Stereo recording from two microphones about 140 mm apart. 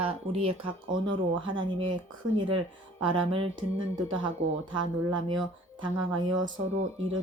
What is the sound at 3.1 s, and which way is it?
Speech, 40° right (ahead or behind).